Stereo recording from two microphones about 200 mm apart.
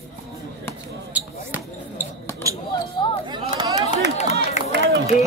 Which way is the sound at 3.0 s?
25° left (ahead or behind).